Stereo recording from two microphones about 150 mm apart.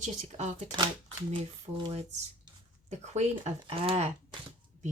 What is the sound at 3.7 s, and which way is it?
Speech, 40° right (ahead or behind).